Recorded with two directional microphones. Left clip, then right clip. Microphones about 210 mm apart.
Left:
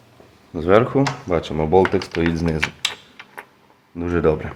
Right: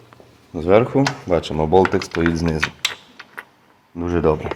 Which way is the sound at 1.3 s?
20° right (ahead or behind).